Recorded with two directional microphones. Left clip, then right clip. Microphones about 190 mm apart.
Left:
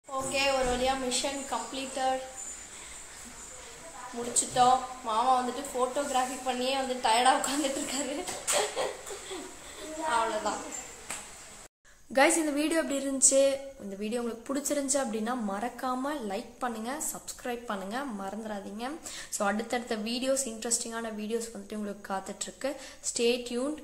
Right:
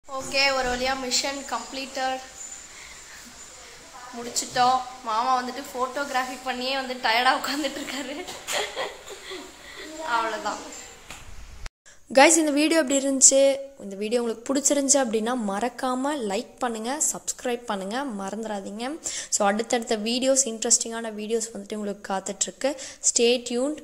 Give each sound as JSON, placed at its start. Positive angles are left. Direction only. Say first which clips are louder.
{"t": 0.1, "sound": "speech", "louder": "right 5 dB", "side_deg": -15}
{"t": 4.6, "sound": "speech", "louder": "right 2 dB", "side_deg": -10}
{"t": 12.1, "sound": "a woman's voice", "louder": "right 8 dB", "side_deg": -50}